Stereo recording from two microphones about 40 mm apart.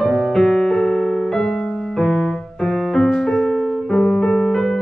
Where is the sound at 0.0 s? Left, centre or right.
Centre.